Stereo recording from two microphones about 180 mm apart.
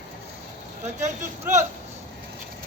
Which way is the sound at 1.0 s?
45° right (ahead or behind).